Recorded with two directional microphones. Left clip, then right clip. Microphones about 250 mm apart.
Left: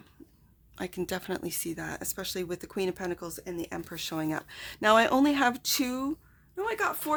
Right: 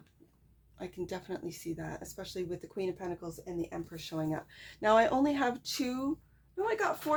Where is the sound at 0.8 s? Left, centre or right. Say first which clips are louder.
Left 6 dB; left.